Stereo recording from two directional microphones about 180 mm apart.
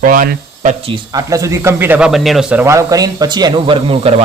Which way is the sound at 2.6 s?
15° right (ahead or behind).